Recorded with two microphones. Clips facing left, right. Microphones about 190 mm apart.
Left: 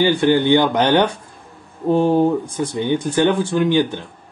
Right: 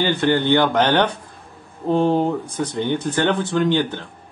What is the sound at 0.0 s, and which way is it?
Speech, 10° left (ahead or behind).